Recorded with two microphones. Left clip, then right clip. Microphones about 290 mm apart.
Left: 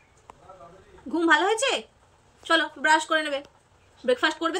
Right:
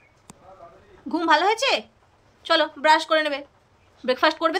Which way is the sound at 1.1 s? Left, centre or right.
Centre.